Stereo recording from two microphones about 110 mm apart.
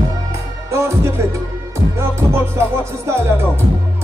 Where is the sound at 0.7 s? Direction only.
25° right (ahead or behind).